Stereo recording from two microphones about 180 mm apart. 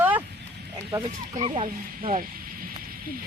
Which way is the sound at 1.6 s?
45° right (ahead or behind).